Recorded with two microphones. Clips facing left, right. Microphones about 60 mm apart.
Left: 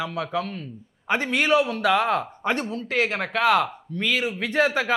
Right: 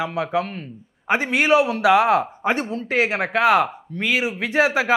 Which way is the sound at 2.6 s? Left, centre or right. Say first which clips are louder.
Right 3 dB; right.